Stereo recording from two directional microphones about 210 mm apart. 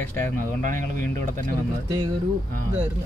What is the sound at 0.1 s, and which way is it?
Speech, 40° right (ahead or behind).